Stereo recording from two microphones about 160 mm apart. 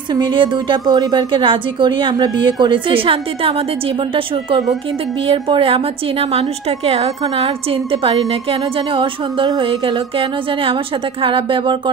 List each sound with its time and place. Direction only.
0.1 s a woman's voice: 25° right (ahead or behind)